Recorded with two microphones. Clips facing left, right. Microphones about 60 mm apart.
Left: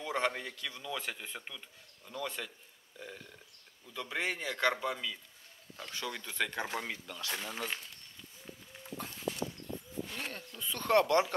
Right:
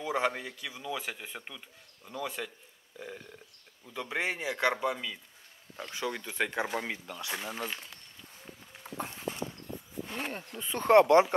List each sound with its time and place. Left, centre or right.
0.0 s a man's voice: centre
8.8 s dog: right
10.0 s speech: right